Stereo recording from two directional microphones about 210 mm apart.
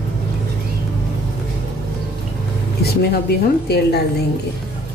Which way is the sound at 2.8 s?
50° left (ahead or behind).